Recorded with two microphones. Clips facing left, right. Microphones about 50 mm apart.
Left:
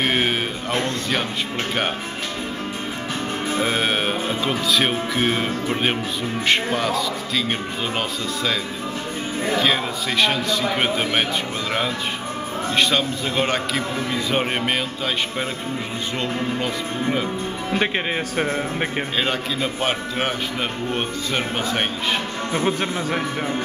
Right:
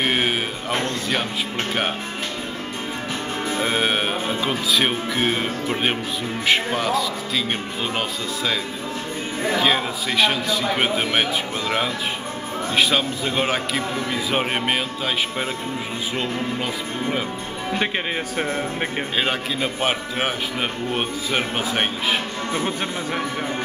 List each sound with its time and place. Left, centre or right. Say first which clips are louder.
0.0 s a sound: left 1 dB; centre
3.5 s speech: even; centre
9.6 s speech: right 1 dB; centre
12.7 s speech: even; centre
18.3 s speech: left 1 dB; centre
19.1 s a man's voice: right 1 dB; centre
22.8 s speech: left 2 dB; centre